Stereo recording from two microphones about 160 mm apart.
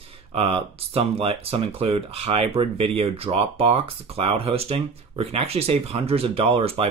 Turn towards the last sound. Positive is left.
turn(degrees=-35)  # may be behind; listen again after turning